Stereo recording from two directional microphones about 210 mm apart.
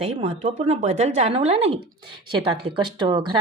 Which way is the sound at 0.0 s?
30° right (ahead or behind).